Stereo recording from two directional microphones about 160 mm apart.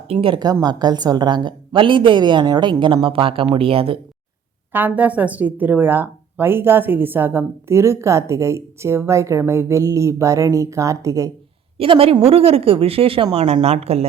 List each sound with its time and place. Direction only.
0.1 s a woman's voice: 35° right (ahead or behind)
4.7 s speech: 10° right (ahead or behind)
11.8 s speech: 35° right (ahead or behind)